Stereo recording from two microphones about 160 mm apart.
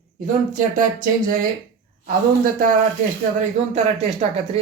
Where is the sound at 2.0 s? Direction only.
60° right (ahead or behind).